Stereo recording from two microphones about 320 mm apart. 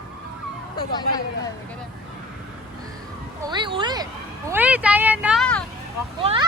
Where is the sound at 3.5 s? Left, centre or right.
Centre.